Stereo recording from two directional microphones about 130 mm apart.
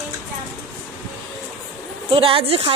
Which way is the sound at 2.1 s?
45° right (ahead or behind).